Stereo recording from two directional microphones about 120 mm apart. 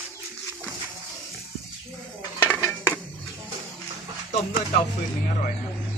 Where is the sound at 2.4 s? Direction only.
15° left (ahead or behind).